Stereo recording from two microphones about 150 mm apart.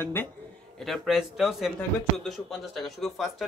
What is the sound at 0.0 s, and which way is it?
Speech, 15° left (ahead or behind).